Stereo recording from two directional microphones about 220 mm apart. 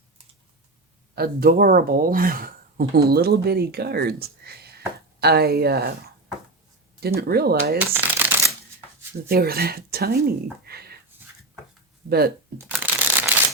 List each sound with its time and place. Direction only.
1.1 s speech: 45° right (ahead or behind)
7.0 s speech: 45° right (ahead or behind)
7.8 s shuffling cards: 10° right (ahead or behind)
9.3 s speech: 45° right (ahead or behind)
12.0 s speech: 45° right (ahead or behind)
12.7 s crushing: 10° right (ahead or behind)